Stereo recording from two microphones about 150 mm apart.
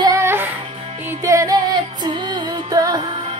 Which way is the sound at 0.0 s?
20° right (ahead or behind).